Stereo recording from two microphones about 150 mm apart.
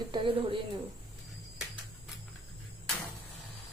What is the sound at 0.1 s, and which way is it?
Speech, 35° right (ahead or behind).